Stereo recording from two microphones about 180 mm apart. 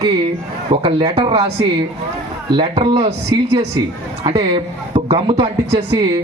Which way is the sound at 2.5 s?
25° right (ahead or behind).